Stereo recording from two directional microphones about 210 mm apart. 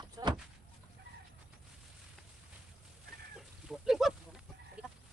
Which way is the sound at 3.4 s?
Centre (ahead or behind).